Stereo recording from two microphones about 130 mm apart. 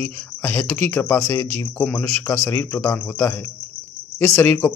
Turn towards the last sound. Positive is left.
turn(degrees=15)  # may be behind; listen again after turning